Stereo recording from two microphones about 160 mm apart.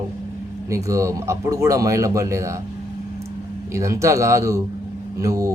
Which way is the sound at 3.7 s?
20° right (ahead or behind).